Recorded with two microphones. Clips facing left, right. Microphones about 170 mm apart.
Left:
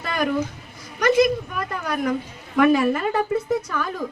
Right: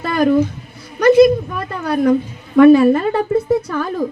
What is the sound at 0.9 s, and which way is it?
Speech, 35° right (ahead or behind).